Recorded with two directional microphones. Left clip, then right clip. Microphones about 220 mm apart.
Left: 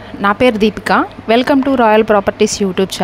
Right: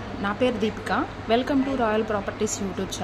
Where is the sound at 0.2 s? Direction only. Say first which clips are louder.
Left 13 dB; 45° left (ahead or behind).